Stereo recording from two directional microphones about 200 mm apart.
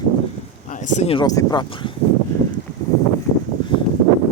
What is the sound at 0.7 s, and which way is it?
Speech, 40° left (ahead or behind).